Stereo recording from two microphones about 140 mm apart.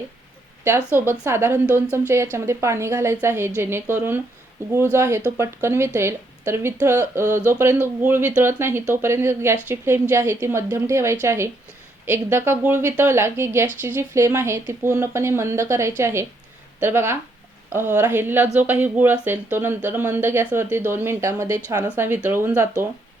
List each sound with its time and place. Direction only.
0.9 s a woman's voice: 15° right (ahead or behind)